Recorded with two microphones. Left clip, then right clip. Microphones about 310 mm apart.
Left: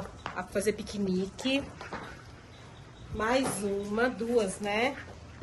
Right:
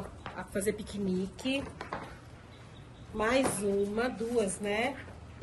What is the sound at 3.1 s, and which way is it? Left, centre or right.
Speech, centre.